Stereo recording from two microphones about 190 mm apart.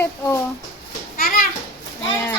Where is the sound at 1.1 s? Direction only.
50° left (ahead or behind).